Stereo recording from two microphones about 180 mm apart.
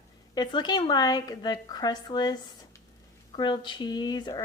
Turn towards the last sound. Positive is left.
turn(degrees=20)  # may be behind; listen again after turning